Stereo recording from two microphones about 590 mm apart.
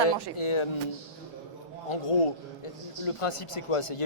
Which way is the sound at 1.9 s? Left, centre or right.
Left.